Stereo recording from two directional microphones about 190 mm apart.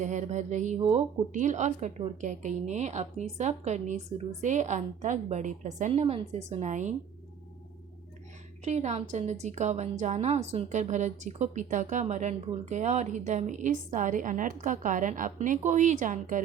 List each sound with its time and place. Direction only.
0.0 s a woman's voice: 40° right (ahead or behind)
8.6 s a woman's voice: 35° right (ahead or behind)